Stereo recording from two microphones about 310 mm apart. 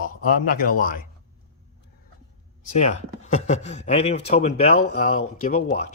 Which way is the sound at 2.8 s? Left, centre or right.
Left.